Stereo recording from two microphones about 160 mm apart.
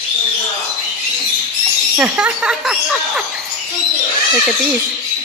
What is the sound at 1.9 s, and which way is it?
Speech, 5° right (ahead or behind).